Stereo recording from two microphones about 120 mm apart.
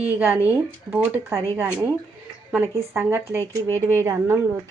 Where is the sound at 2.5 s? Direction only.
20° right (ahead or behind).